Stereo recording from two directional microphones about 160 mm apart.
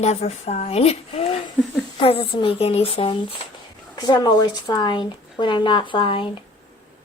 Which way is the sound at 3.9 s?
25° left (ahead or behind).